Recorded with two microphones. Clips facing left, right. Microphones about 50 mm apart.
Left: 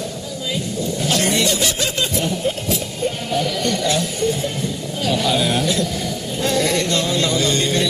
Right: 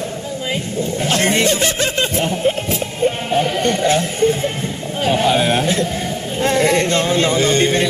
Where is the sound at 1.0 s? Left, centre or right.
Right.